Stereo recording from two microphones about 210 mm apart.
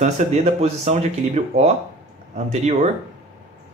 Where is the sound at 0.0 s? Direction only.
30° right (ahead or behind).